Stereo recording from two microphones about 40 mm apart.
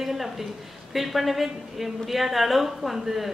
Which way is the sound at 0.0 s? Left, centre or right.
Centre.